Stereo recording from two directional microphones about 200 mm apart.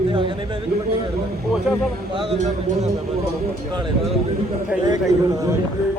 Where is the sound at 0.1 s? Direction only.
25° right (ahead or behind).